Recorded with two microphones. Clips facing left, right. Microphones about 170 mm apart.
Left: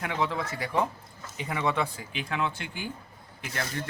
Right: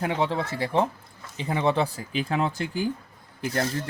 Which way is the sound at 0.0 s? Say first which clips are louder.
Right 4 dB; 30° right (ahead or behind).